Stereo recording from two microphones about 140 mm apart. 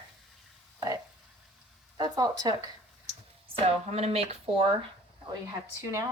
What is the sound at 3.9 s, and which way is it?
Speech, 50° right (ahead or behind).